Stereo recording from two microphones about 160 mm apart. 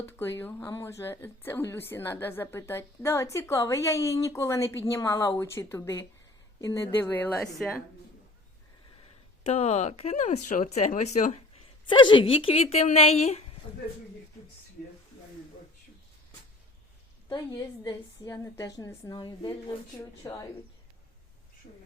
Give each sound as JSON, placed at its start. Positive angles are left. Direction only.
{"t": 0.0, "sound": "a woman's voice", "side_deg": 15}
{"t": 9.4, "sound": "speech", "side_deg": 40}
{"t": 11.9, "sound": "speech", "side_deg": 30}
{"t": 17.2, "sound": "a woman's voice", "side_deg": 25}